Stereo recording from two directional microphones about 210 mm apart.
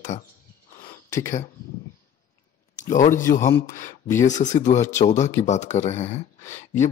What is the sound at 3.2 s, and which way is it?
Speech, 15° left (ahead or behind).